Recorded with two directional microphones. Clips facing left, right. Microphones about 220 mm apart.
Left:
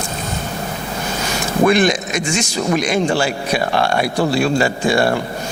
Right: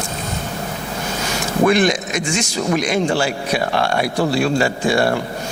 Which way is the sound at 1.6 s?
15° left (ahead or behind).